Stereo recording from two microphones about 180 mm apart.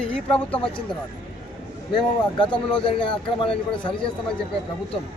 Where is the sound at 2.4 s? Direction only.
30° left (ahead or behind).